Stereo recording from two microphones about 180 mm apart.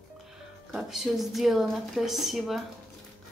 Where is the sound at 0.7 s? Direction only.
Centre (ahead or behind).